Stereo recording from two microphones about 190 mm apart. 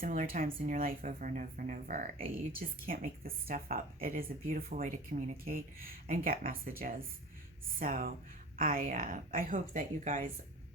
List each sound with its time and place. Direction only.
0.0 s a woman's voice: 45° right (ahead or behind)